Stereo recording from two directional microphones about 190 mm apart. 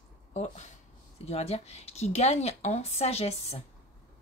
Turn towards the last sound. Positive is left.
turn(degrees=30)  # may be behind; listen again after turning